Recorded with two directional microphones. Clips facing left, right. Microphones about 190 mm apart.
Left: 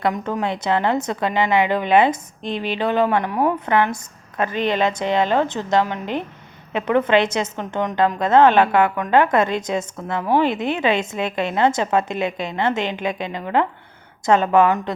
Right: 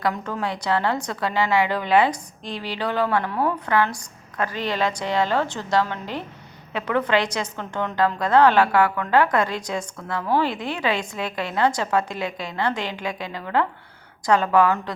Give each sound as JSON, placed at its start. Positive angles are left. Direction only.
{"t": 0.0, "sound": "a woman's voice", "side_deg": 20}